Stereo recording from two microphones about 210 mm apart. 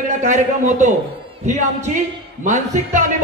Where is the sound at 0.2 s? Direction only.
35° right (ahead or behind).